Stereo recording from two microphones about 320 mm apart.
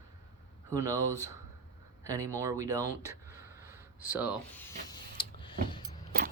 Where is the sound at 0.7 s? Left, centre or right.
Centre.